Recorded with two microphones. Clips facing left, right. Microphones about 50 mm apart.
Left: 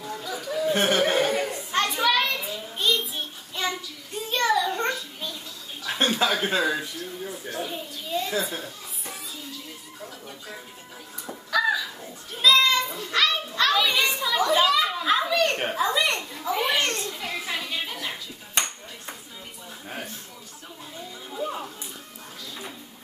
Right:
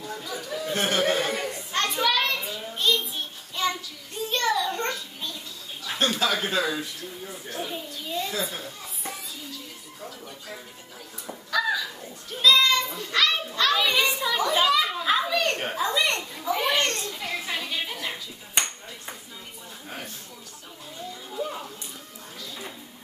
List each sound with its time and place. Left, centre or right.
0.0 s chatter: centre
0.7 s speech: centre
1.2 s children playing: centre
4.3 s child singing: centre
5.9 s speech: left
7.4 s a sound: centre
11.2 s fowl: centre
12.4 s children playing: centre
13.7 s a sound: centre
15.7 s children playing: centre
21.3 s a sound: centre